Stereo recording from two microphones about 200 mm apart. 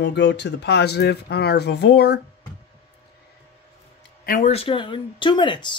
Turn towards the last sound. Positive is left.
turn(degrees=25)  # may be behind; listen again after turning